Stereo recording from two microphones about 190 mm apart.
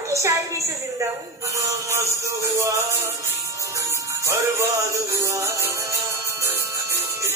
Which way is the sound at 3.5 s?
15° right (ahead or behind).